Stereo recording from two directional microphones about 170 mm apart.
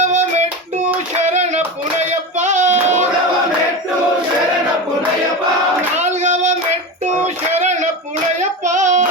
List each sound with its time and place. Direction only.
0.0 s child singing: 45° right (ahead or behind)
1.1 s clapping: 40° right (ahead or behind)
2.0 s music: 45° right (ahead or behind)
6.0 s child singing: 45° right (ahead or behind)
7.5 s a sound: 40° right (ahead or behind)
8.4 s female singing: 45° right (ahead or behind)